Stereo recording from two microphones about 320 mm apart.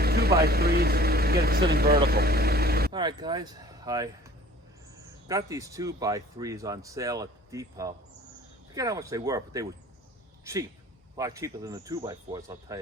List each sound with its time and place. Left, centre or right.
0.0 s speech: right
2.0 s vehicle: right
2.9 s speech: centre
5.3 s speech: centre